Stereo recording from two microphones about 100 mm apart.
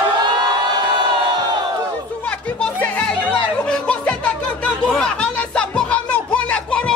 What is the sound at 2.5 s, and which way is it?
Music, 15° left (ahead or behind).